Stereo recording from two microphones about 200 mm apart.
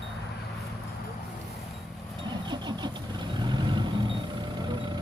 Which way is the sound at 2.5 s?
20° right (ahead or behind).